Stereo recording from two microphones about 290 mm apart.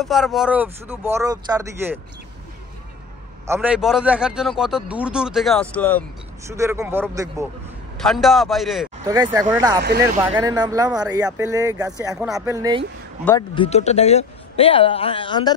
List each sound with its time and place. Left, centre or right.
0.0 s speech: centre
3.4 s a man's voice: centre
6.4 s a man's voice: centre
9.0 s speech: centre
13.6 s speech: left